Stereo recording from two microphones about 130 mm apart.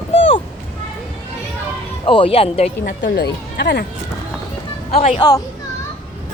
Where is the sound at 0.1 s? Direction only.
45° left (ahead or behind).